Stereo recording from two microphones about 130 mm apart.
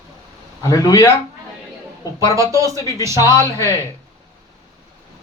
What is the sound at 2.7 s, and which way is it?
Speech, 25° left (ahead or behind).